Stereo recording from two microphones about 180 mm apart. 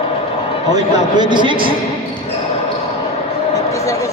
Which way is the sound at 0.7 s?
25° right (ahead or behind).